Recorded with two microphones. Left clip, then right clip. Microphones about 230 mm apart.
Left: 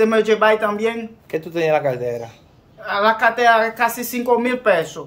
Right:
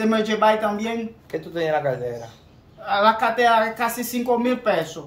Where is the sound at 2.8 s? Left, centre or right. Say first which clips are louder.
Left 2 dB; centre.